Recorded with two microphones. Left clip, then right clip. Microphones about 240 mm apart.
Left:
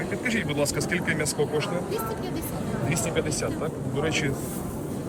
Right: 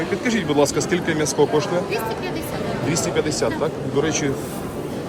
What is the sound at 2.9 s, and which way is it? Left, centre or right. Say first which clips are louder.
Speech: right 6 dB; centre.